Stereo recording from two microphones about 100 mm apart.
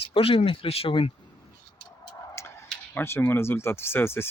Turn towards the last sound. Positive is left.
turn(degrees=25)  # may be behind; listen again after turning